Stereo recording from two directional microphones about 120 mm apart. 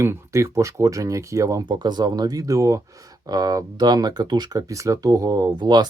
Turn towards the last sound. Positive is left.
turn(degrees=-35)  # may be behind; listen again after turning